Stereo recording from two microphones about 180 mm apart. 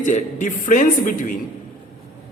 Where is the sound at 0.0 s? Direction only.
45° left (ahead or behind).